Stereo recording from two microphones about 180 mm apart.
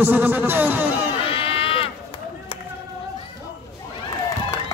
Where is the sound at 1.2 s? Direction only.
30° left (ahead or behind).